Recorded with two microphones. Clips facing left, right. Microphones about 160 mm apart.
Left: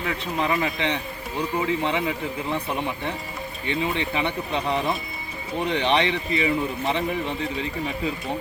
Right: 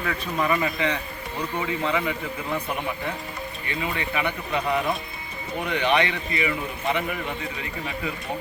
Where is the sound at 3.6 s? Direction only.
25° left (ahead or behind).